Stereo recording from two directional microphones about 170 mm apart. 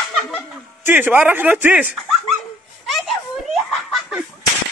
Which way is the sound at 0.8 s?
10° right (ahead or behind).